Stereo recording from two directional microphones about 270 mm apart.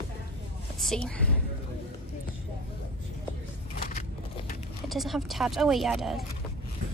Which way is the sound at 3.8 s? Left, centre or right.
Left.